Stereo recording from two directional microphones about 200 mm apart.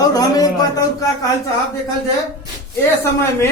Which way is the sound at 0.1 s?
20° left (ahead or behind).